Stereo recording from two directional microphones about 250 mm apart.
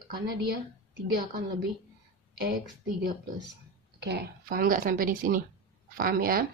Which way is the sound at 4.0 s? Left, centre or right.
Right.